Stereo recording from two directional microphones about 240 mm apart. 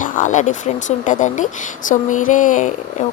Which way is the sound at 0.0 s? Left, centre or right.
Left.